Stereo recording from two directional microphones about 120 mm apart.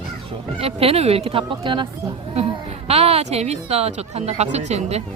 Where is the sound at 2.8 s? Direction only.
55° right (ahead or behind).